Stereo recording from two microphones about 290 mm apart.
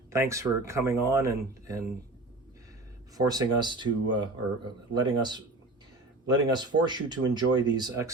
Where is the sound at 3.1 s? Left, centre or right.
Centre.